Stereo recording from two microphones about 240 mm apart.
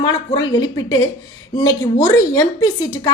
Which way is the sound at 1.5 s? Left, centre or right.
Centre.